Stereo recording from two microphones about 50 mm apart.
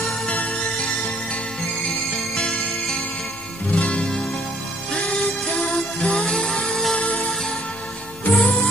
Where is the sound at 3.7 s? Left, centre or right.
Left.